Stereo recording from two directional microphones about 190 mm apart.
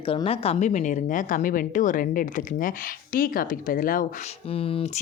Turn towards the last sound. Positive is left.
turn(degrees=30)  # may be behind; listen again after turning